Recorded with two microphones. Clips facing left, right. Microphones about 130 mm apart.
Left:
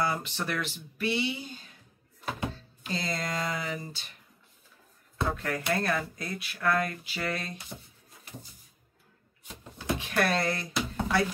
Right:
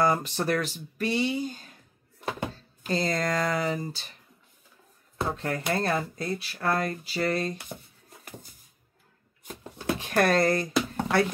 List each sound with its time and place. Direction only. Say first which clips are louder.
0.0 s speech: right 6 dB; 40° right (ahead or behind)
2.8 s speech: right 6 dB; 45° right (ahead or behind)
5.3 s speech: right 2 dB; 25° right (ahead or behind)
9.5 s speech: right 2 dB; 40° right (ahead or behind)